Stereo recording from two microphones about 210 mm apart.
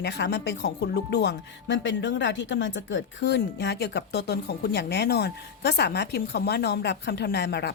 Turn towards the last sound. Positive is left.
turn(degrees=50)  # may be behind; listen again after turning